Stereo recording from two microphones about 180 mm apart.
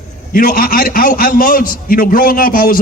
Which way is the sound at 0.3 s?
55° left (ahead or behind).